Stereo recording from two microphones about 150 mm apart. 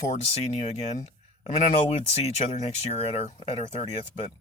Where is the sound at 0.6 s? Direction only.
45° left (ahead or behind).